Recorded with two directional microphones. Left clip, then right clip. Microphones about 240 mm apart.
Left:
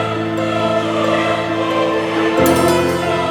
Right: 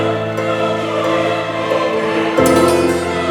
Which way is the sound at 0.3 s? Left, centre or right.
Centre.